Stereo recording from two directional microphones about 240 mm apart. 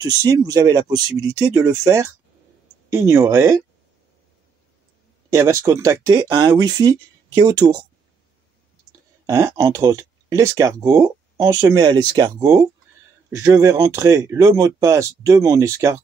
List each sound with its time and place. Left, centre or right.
0.0 s speech: centre
5.3 s speech: centre
9.2 s speech: centre